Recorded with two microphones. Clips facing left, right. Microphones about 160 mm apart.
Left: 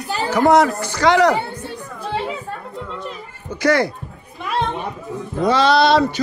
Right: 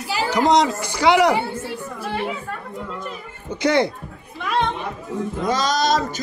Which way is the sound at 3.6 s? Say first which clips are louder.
Left 1 dB; 25° right (ahead or behind).